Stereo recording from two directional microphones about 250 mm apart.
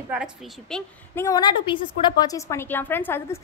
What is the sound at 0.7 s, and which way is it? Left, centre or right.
A woman's voice, centre.